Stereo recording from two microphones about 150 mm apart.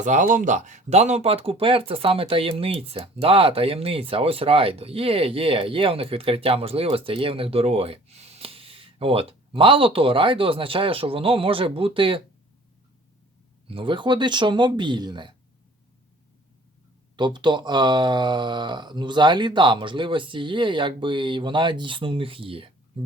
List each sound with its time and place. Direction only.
0.0 s speech: 55° right (ahead or behind); by 12.2 s 35° right (ahead or behind)
13.7 s speech: 35° right (ahead or behind)
17.2 s speech: 30° right (ahead or behind)